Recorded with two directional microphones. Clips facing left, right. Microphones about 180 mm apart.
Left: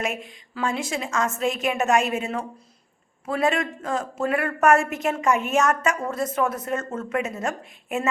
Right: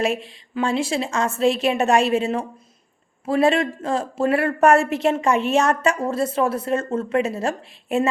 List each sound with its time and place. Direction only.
0.0 s speech: 30° right (ahead or behind)